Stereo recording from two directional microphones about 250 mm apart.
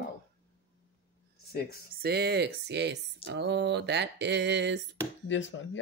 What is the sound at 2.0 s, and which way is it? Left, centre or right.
Speech, right.